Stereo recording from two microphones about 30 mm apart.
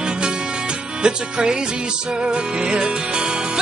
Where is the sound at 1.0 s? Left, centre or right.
Right.